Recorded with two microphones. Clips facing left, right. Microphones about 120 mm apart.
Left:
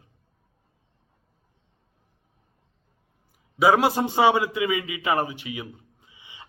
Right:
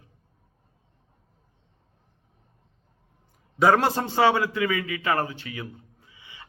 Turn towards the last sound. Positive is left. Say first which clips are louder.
# even
turn(degrees=20)  # may be behind; listen again after turning